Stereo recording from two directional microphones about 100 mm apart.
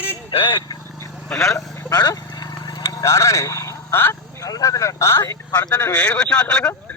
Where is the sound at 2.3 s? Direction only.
40° left (ahead or behind).